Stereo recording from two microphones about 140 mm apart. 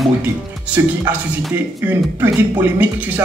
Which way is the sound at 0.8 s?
15° right (ahead or behind).